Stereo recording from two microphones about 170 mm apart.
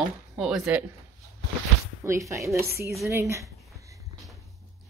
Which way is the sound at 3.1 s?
15° right (ahead or behind).